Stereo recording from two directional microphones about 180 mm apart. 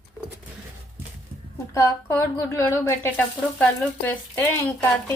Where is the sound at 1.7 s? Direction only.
15° left (ahead or behind).